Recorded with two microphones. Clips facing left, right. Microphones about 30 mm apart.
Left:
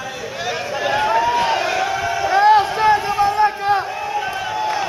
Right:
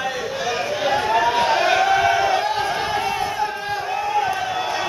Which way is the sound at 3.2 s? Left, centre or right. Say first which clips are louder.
Left 7 dB; left.